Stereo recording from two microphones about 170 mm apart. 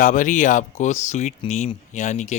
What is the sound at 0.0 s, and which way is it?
A man's voice, 50° left (ahead or behind).